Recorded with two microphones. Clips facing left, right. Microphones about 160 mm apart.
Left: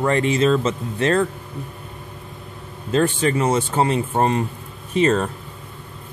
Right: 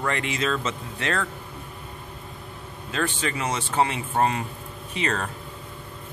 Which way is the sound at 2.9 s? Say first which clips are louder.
Left 9 dB; 40° left (ahead or behind).